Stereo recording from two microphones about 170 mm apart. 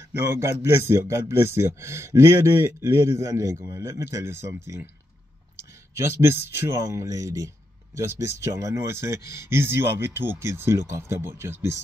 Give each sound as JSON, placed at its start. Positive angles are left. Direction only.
{"t": 0.3, "sound": "speech", "side_deg": -15}
{"t": 5.6, "sound": "clicking", "side_deg": -15}
{"t": 6.5, "sound": "speech", "side_deg": -15}